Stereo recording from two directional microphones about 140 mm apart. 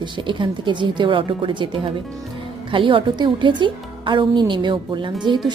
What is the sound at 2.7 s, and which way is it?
Speech, 35° right (ahead or behind).